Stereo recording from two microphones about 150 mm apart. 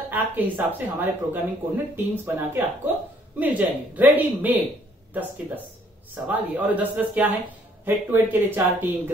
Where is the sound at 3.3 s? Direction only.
10° right (ahead or behind).